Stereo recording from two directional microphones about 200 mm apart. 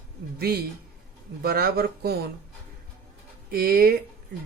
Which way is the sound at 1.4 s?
50° right (ahead or behind).